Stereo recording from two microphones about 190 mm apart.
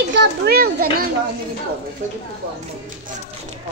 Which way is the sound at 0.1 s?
55° right (ahead or behind).